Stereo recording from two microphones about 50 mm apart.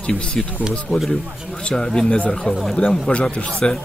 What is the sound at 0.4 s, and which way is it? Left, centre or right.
Speech, centre.